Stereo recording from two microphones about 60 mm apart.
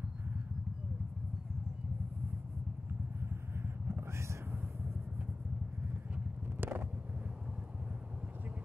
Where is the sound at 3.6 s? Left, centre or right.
Right.